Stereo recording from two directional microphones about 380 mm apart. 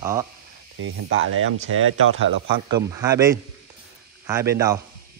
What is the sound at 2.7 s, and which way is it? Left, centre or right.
Speech, centre.